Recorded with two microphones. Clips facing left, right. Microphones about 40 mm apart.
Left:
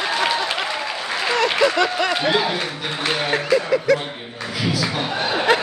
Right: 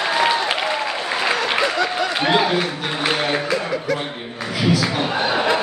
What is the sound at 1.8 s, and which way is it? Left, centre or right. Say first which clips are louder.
Speech: left 2 dB; left.